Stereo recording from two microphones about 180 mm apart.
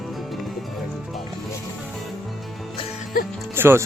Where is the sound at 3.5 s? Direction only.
10° right (ahead or behind).